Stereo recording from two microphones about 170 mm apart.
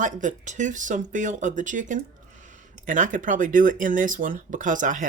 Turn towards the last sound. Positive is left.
turn(degrees=-50)  # may be behind; listen again after turning